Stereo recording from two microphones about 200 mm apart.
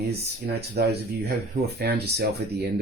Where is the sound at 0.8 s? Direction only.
55° right (ahead or behind).